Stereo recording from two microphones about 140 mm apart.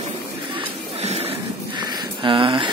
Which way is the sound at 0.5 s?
50° right (ahead or behind).